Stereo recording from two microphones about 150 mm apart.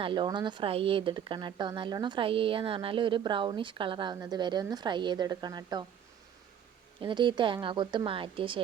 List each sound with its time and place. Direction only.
0.0 s speech: 35° right (ahead or behind)
7.0 s speech: 30° right (ahead or behind)